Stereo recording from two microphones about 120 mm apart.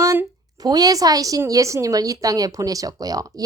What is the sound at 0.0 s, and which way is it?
A woman's voice, 25° right (ahead or behind).